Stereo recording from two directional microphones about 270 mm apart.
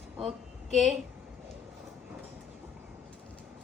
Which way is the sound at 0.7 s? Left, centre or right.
Centre.